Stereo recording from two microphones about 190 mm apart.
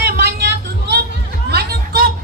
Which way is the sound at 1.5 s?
55° right (ahead or behind).